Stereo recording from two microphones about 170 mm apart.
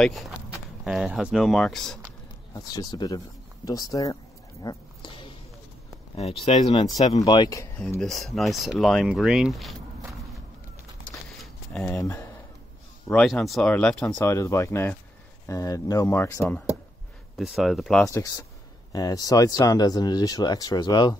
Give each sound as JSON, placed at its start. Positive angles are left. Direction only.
{"t": 0.0, "sound": "speech", "side_deg": 0}
{"t": 2.5, "sound": "speech", "side_deg": 25}
{"t": 4.6, "sound": "a sound", "side_deg": 30}
{"t": 6.1, "sound": "speech", "side_deg": 35}
{"t": 7.2, "sound": "speech", "side_deg": 20}
{"t": 8.0, "sound": "speech", "side_deg": 0}
{"t": 11.7, "sound": "speech", "side_deg": 10}
{"t": 13.1, "sound": "speech", "side_deg": 0}
{"t": 17.4, "sound": "speech", "side_deg": 0}
{"t": 18.0, "sound": "speech", "side_deg": 20}